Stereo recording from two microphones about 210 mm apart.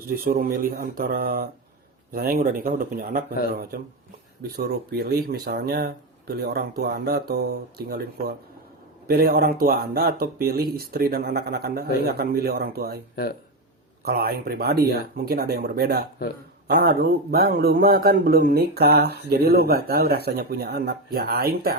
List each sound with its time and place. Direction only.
0.1 s a man's voice: 45° right (ahead or behind)
14.0 s a man's voice: 45° right (ahead or behind)